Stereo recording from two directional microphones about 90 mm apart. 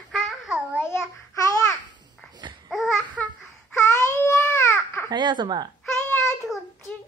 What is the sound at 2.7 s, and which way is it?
Babbling, centre (ahead or behind).